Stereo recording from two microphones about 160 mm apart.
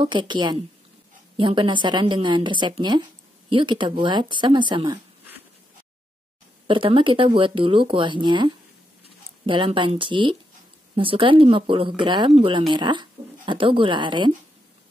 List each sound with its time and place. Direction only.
0.0 s a woman's voice: 30° right (ahead or behind)
6.7 s speech: 35° right (ahead or behind)